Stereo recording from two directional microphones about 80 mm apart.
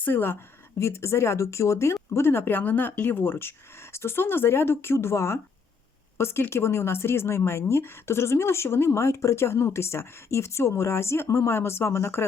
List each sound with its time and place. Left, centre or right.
0.0 s a woman's voice: left
0.8 s a woman's voice: left